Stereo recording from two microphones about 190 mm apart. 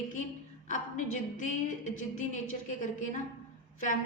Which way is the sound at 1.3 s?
40° left (ahead or behind).